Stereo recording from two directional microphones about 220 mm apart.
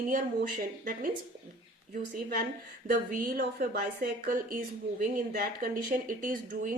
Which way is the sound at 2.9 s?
40° right (ahead or behind).